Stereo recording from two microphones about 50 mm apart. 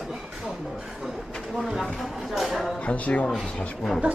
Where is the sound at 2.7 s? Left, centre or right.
Left.